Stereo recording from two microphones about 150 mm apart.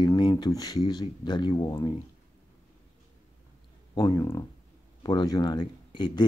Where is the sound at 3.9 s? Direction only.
25° left (ahead or behind).